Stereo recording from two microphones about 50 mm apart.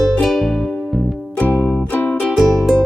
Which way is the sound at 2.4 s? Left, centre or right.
Centre.